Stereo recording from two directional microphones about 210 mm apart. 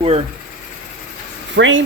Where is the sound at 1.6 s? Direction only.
65° right (ahead or behind).